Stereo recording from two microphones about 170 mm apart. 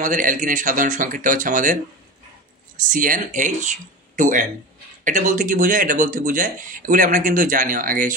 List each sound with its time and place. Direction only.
0.0 s speech: 50° right (ahead or behind)
2.9 s speech: 50° right (ahead or behind)